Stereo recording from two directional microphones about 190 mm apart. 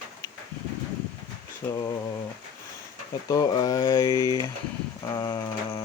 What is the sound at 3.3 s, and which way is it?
Speech, 20° left (ahead or behind).